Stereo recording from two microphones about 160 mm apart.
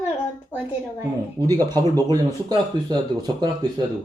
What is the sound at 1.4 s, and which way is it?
Speech, 25° right (ahead or behind).